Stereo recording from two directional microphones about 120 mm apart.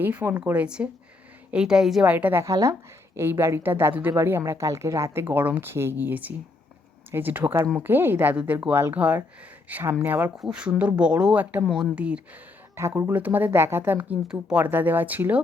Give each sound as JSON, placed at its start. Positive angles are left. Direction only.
{"t": 0.0, "sound": "speech", "side_deg": -15}
{"t": 12.7, "sound": "speech", "side_deg": -20}